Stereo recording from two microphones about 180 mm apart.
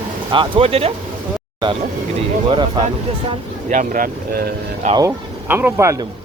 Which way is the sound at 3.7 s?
45° right (ahead or behind).